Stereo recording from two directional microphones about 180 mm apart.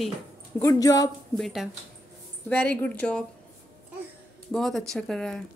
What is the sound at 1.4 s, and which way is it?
A woman's voice, centre (ahead or behind).